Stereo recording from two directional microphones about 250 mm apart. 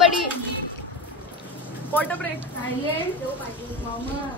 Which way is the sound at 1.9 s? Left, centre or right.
Centre.